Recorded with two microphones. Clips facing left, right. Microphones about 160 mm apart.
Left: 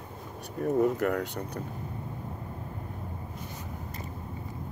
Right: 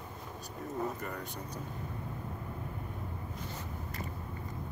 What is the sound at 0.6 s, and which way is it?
Speech, 70° left (ahead or behind).